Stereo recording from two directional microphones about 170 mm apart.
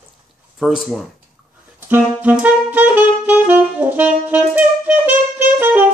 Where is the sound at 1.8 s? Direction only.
10° right (ahead or behind).